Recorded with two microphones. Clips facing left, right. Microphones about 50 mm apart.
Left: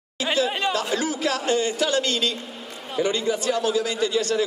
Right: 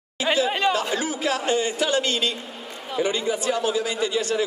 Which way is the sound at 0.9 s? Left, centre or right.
Right.